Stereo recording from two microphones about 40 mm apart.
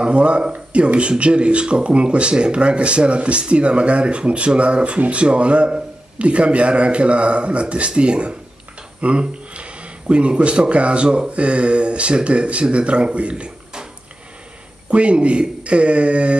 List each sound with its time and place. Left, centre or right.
0.0 s speech: right
14.9 s speech: right